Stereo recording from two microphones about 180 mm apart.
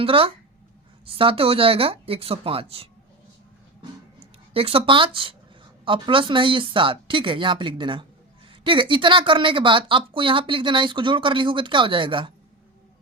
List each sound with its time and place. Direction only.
0.0 s speech: 30° right (ahead or behind)
4.5 s a woman's voice: 30° right (ahead or behind)